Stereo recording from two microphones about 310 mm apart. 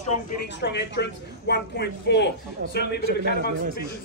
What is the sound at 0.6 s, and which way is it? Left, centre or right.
A man's voice, left.